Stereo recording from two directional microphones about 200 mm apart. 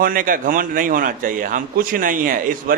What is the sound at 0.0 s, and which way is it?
Speech, 45° right (ahead or behind).